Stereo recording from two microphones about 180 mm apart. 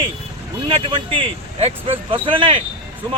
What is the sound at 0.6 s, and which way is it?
Speech, 30° right (ahead or behind).